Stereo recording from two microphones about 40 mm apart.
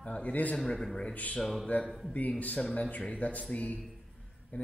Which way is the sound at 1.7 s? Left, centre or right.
Left.